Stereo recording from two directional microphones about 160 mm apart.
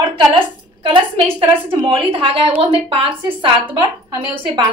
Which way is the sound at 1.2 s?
15° right (ahead or behind).